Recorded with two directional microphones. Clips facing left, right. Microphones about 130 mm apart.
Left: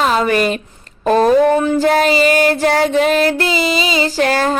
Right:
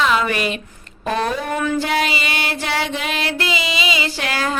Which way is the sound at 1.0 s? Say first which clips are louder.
Left 11 dB; 40° left (ahead or behind).